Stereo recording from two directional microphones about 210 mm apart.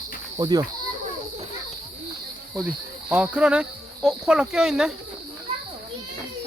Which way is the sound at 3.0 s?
5° right (ahead or behind).